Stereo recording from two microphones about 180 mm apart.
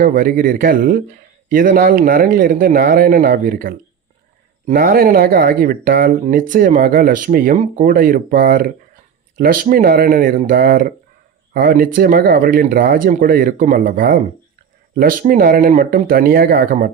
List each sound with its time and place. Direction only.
0.0 s speech: 50° right (ahead or behind)